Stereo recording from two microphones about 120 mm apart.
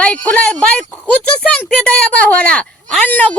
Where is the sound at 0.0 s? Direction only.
10° left (ahead or behind).